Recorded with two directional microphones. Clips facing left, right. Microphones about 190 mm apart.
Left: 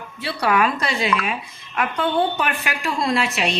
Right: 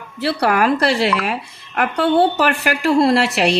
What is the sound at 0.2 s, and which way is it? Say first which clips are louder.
Speech: right 3 dB; 65° right (ahead or behind).